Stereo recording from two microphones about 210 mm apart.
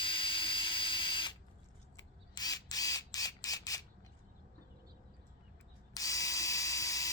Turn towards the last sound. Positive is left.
turn(degrees=15)  # may be behind; listen again after turning